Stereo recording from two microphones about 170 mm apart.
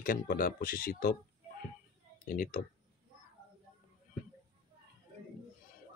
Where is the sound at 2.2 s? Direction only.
50° left (ahead or behind).